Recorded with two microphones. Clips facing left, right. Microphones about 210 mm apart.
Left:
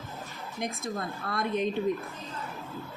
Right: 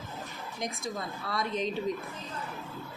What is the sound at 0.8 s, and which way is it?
Speech, 50° left (ahead or behind).